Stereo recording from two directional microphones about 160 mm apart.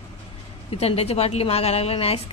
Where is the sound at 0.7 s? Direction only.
40° left (ahead or behind).